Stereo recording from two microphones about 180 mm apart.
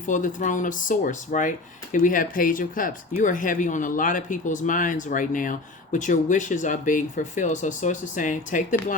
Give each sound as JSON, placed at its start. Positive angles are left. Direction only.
{"t": 0.1, "sound": "speech", "side_deg": 45}